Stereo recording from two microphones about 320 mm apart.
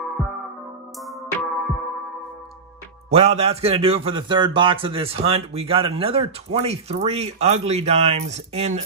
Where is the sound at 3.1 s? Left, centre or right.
Centre.